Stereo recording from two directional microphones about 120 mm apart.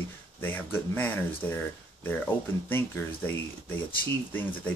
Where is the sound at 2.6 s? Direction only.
15° left (ahead or behind).